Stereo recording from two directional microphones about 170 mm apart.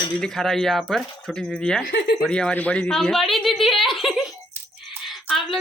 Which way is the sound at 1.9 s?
90° left.